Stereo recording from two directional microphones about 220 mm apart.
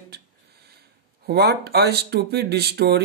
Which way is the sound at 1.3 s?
45° right (ahead or behind).